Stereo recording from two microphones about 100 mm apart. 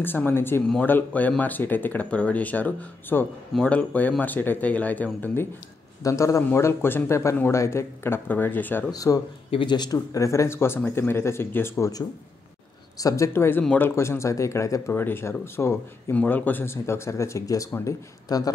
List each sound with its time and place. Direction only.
0.0 s speech: 20° left (ahead or behind)
6.0 s a man's voice: 30° left (ahead or behind)
8.9 s a man's voice: 35° left (ahead or behind)
9.5 s speech: 55° left (ahead or behind)
10.1 s speech: 30° left (ahead or behind)